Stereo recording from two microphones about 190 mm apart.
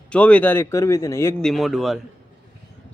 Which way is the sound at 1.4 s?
Centre (ahead or behind).